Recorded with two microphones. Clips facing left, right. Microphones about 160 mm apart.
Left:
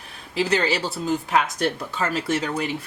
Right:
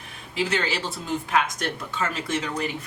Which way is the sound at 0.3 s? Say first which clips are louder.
Left 4 dB; 35° left (ahead or behind).